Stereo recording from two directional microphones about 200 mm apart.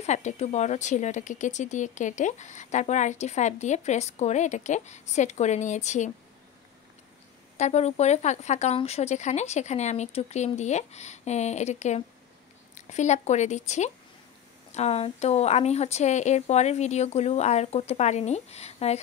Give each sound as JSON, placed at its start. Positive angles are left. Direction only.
{"t": 0.0, "sound": "speech", "side_deg": 35}
{"t": 7.5, "sound": "speech", "side_deg": 35}